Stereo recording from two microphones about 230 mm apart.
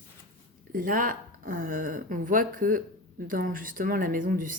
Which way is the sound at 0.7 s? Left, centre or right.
Right.